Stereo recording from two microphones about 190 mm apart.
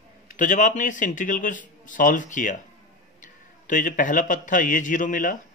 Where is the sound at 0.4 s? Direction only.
40° left (ahead or behind).